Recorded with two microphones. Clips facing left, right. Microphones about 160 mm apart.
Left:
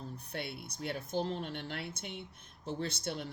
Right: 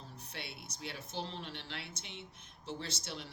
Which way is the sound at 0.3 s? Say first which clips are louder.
Left 7 dB; 50° left (ahead or behind).